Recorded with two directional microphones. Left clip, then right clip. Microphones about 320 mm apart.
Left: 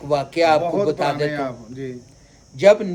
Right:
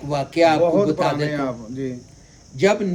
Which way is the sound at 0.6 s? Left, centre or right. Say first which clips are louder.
Right 4 dB; centre.